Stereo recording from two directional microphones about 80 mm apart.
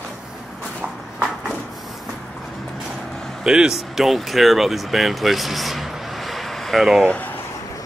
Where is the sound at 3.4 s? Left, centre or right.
Centre.